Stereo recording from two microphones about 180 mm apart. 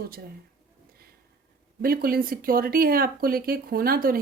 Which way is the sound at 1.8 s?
55° right (ahead or behind).